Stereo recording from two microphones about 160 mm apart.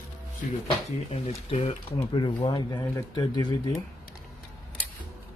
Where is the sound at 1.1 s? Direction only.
40° left (ahead or behind).